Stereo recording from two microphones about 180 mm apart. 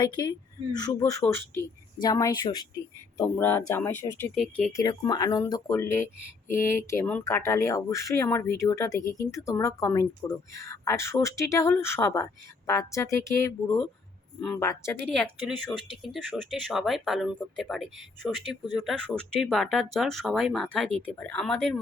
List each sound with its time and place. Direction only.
0.0 s speech: 20° left (ahead or behind)
3.2 s speech: 10° left (ahead or behind)
4.7 s speech: 20° left (ahead or behind)
15.1 s speech: 5° left (ahead or behind)
18.6 s speech: 20° left (ahead or behind)
18.9 s speech: 5° left (ahead or behind)